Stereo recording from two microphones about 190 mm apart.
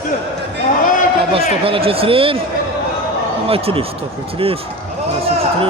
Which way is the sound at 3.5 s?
30° right (ahead or behind).